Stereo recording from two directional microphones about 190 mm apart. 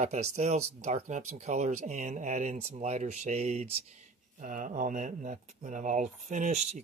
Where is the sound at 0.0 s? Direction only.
35° right (ahead or behind).